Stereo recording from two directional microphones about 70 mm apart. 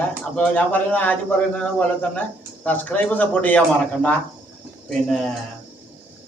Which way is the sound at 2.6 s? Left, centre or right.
Left.